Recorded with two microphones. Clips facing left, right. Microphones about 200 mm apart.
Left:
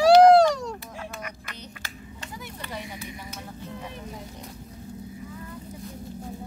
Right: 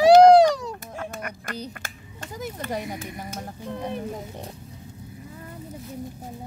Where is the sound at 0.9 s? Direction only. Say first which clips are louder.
Right 4 dB; 50° right (ahead or behind).